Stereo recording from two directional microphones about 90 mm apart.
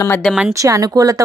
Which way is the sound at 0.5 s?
40° right (ahead or behind).